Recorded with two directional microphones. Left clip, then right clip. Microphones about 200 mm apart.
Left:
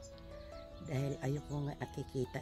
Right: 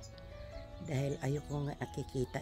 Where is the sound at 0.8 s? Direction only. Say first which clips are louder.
Right 2 dB; 15° right (ahead or behind).